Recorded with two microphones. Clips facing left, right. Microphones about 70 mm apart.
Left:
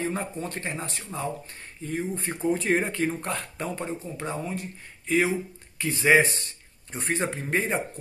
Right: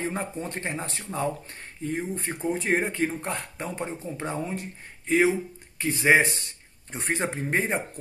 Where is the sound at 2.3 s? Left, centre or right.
Centre.